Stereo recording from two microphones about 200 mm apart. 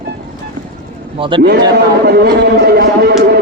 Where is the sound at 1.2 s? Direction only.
30° right (ahead or behind).